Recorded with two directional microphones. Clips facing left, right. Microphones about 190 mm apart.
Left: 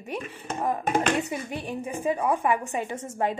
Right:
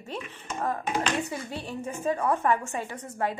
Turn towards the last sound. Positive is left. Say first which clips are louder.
# left 3 dB
turn(degrees=25)  # may be behind; listen again after turning